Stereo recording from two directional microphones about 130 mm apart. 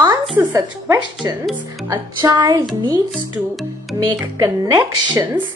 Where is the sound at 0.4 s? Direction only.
25° right (ahead or behind).